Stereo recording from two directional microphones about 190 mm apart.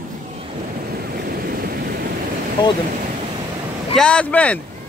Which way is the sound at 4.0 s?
5° left (ahead or behind).